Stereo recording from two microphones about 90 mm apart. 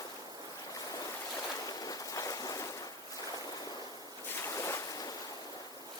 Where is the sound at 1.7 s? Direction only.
45° left (ahead or behind).